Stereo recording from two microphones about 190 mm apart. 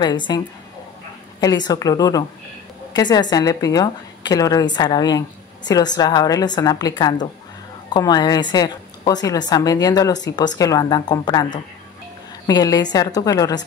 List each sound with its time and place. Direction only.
0.0 s a woman's voice: 25° left (ahead or behind)
1.4 s a woman's voice: 20° left (ahead or behind)